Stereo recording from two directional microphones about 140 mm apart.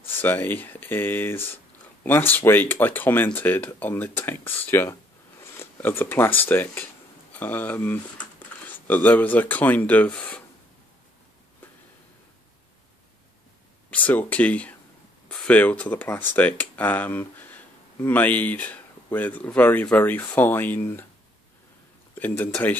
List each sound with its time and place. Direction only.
0.2 s speech: 15° left (ahead or behind)
13.8 s speech: 10° left (ahead or behind)
22.1 s speech: 10° left (ahead or behind)